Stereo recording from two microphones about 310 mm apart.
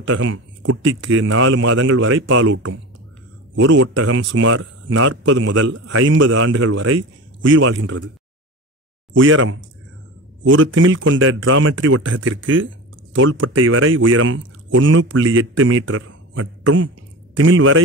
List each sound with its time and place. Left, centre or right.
0.0 s a man's voice: right
9.1 s speech: right